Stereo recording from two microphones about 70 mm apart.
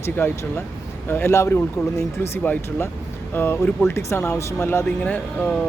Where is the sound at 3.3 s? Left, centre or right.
Left.